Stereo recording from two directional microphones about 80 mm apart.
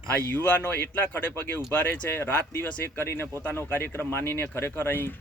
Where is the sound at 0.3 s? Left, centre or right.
Left.